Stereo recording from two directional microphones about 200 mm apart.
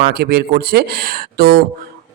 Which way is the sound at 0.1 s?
50° right (ahead or behind).